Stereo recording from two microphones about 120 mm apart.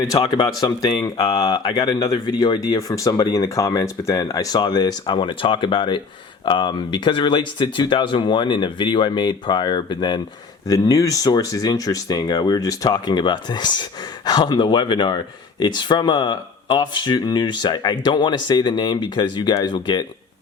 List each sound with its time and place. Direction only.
0.1 s speech: 35° left (ahead or behind)
10.7 s speech: 30° left (ahead or behind)